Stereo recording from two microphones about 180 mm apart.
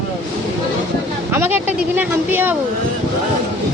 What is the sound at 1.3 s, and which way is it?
Speech, 10° right (ahead or behind).